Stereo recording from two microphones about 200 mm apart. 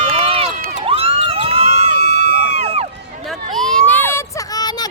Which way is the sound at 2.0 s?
55° left (ahead or behind).